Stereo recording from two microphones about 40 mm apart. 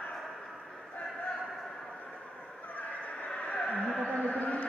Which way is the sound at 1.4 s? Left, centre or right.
Centre.